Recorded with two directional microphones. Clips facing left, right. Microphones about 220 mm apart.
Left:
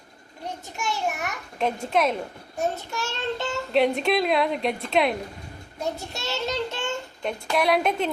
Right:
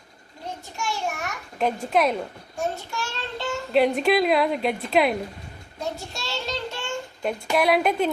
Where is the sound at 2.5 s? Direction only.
20° left (ahead or behind).